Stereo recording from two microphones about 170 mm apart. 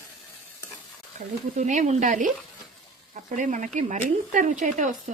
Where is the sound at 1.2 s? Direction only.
45° right (ahead or behind).